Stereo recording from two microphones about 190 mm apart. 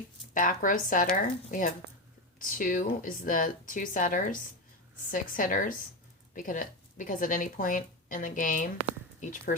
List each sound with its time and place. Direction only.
0.3 s a woman's voice: 45° left (ahead or behind)